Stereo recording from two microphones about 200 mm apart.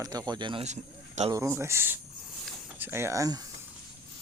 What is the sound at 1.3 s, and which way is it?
Speech, 15° right (ahead or behind).